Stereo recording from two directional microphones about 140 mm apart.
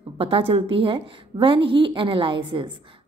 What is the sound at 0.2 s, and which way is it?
A woman's voice, 40° right (ahead or behind).